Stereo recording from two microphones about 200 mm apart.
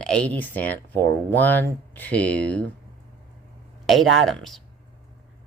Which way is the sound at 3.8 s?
Centre (ahead or behind).